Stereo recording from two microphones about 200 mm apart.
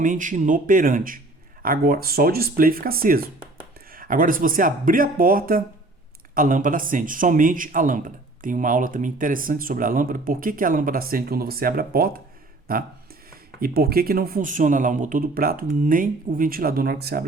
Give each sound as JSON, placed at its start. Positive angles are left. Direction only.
{"t": 0.0, "sound": "a man's voice", "side_deg": -40}